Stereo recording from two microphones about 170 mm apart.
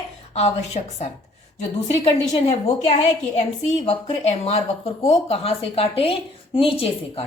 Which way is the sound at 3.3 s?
40° left (ahead or behind).